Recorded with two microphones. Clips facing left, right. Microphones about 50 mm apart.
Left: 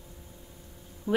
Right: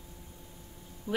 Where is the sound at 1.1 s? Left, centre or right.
Left.